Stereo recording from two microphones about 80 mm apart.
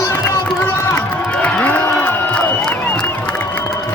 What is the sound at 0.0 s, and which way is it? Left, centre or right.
Run, left.